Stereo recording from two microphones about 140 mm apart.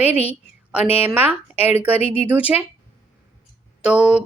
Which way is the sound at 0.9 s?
45° left (ahead or behind).